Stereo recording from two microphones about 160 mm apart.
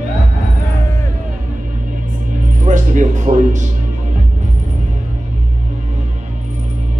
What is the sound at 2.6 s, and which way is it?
Speech, 50° right (ahead or behind).